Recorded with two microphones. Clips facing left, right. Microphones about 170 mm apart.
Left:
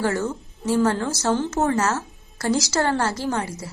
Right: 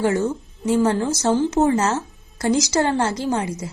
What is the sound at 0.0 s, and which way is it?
A woman's voice, 20° right (ahead or behind).